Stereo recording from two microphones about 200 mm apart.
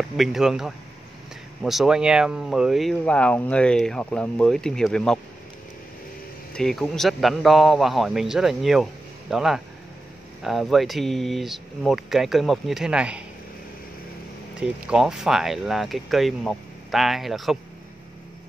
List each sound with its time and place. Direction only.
0.2 s speech: centre (ahead or behind)
6.5 s speech: centre (ahead or behind)
14.6 s speech: 5° right (ahead or behind)